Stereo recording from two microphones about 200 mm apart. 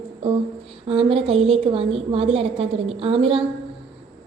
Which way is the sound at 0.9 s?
30° right (ahead or behind).